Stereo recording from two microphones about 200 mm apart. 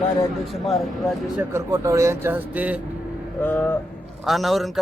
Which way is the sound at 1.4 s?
15° right (ahead or behind).